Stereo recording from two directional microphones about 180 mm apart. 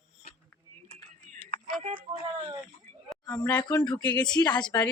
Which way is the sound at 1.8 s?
40° right (ahead or behind).